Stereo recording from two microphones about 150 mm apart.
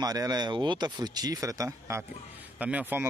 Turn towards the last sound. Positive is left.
turn(degrees=-10)  # may be behind; listen again after turning